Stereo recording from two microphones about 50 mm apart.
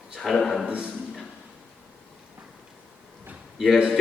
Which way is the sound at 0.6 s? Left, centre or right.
Right.